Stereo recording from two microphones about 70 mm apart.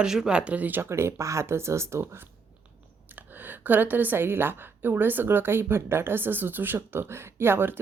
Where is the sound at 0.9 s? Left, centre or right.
Right.